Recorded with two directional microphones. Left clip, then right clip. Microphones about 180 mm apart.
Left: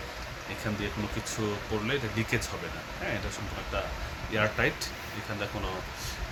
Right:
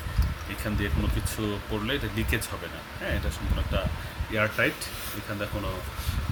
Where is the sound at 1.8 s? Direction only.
50° right (ahead or behind).